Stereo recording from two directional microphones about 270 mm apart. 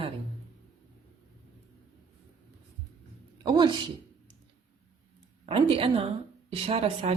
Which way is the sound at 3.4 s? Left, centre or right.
Centre.